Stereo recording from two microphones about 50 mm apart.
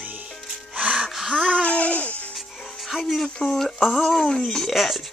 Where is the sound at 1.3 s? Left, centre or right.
Centre.